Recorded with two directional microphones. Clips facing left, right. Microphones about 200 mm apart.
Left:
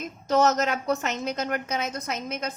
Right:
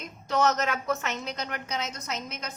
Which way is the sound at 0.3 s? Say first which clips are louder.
Left 4 dB; 40° left (ahead or behind).